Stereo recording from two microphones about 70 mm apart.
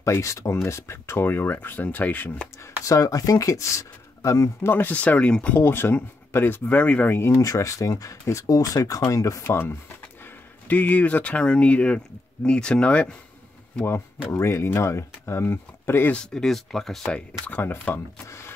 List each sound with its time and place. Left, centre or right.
0.0 s speech: left
2.8 s speech: left
4.6 s speech: left
5.6 s speech: left
7.1 s speech: left
7.4 s speech: left
9.4 s speech: left
10.7 s speech: left
14.3 s speech: left
16.1 s speech: centre
17.1 s speech: left
18.2 s speech: left